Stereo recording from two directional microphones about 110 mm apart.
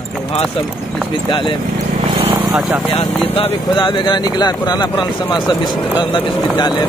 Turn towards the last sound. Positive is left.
turn(degrees=45)  # may be behind; listen again after turning